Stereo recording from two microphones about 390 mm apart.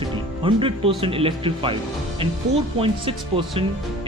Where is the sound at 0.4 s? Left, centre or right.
Centre.